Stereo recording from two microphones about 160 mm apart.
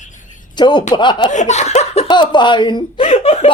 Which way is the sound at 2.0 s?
30° left (ahead or behind).